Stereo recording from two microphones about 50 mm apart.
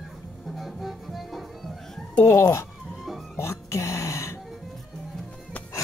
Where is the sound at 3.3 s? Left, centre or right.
Left.